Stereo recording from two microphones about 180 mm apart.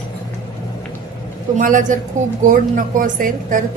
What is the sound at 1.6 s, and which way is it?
Speech, 45° right (ahead or behind).